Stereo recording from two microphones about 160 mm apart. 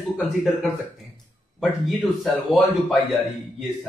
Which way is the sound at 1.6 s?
Centre (ahead or behind).